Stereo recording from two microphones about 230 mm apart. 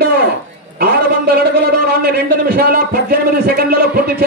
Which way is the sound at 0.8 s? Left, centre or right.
Right.